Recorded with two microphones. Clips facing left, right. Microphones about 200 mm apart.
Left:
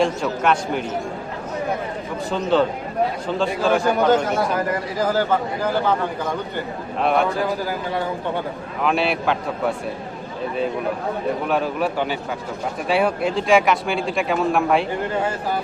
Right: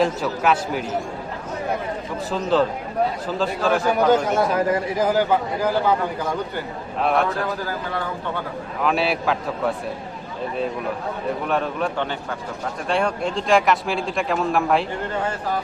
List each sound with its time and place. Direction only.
0.0 s speech: 5° right (ahead or behind)
2.3 s speech: centre (ahead or behind)
4.9 s a man's voice: 15° right (ahead or behind)
7.0 s speech: centre (ahead or behind)
8.8 s speech: centre (ahead or behind)
11.4 s speech: 5° left (ahead or behind)